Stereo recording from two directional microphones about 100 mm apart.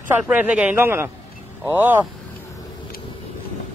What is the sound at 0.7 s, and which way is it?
Speech, 25° right (ahead or behind).